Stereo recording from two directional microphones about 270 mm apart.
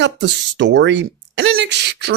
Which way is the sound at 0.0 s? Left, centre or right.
Right.